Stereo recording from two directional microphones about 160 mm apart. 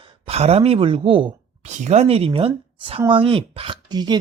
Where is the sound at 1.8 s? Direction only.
45° right (ahead or behind).